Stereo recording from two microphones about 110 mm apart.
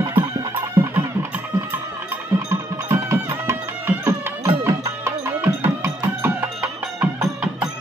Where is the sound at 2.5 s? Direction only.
30° right (ahead or behind).